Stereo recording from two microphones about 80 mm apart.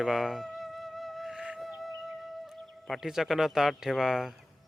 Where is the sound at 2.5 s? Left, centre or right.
Centre.